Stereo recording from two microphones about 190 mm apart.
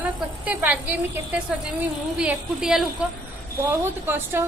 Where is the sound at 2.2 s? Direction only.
5° right (ahead or behind).